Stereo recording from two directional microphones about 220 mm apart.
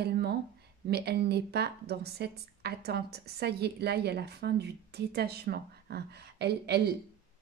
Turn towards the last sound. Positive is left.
turn(degrees=-45)  # may be behind; listen again after turning